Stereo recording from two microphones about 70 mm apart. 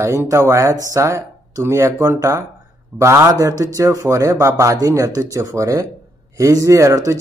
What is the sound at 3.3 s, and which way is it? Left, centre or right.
Speech, right.